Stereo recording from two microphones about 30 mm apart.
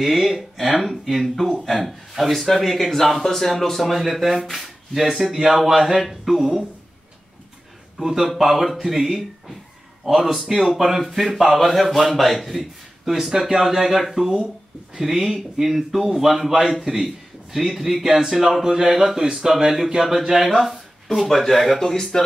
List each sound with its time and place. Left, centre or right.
0.0 s speech: centre
3.8 s a man's voice: centre
8.0 s a man's voice: centre
8.3 s a man's voice: centre
14.2 s a man's voice: centre